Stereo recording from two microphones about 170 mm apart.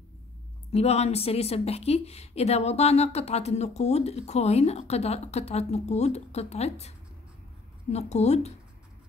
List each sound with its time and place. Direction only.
0.7 s a woman's voice: 40° left (ahead or behind)
7.9 s a woman's voice: 40° left (ahead or behind)